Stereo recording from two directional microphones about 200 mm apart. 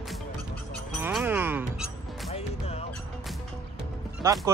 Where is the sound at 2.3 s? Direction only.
30° left (ahead or behind).